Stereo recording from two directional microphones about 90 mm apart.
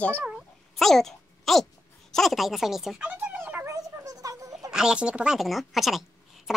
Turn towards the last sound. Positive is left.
turn(degrees=-5)  # may be behind; listen again after turning